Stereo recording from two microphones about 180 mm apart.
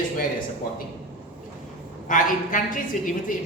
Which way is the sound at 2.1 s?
45° left (ahead or behind).